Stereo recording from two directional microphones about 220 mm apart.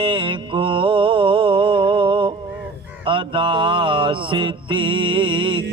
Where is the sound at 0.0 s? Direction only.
25° right (ahead or behind).